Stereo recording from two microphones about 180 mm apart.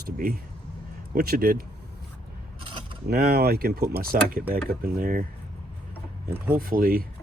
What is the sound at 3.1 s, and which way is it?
Speech, 60° right (ahead or behind).